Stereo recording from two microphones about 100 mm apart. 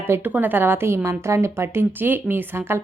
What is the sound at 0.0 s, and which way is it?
Speech, 20° right (ahead or behind).